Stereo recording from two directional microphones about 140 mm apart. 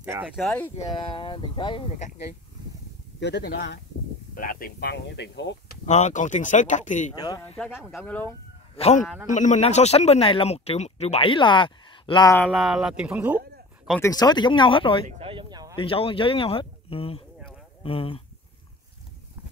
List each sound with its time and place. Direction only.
0.0 s speech: 10° right (ahead or behind)
0.4 s speech: 5° left (ahead or behind)
0.9 s speech: 40° left (ahead or behind)
4.4 s speech: 85° left
5.9 s speech: 60° left (ahead or behind)
7.2 s speech: 30° left (ahead or behind)
7.5 s speech: centre (ahead or behind)
8.7 s speech: 45° left (ahead or behind)
9.0 s speech: 5° right (ahead or behind)
9.3 s speech: 60° left (ahead or behind); by 12.3 s 35° left (ahead or behind)
12.4 s speech: centre (ahead or behind)
14.0 s speech: 30° left (ahead or behind)
15.1 s a sound: 40° right (ahead or behind)
15.8 s speech: 40° left (ahead or behind)